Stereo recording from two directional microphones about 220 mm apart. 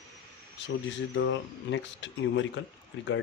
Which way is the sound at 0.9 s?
55° left (ahead or behind).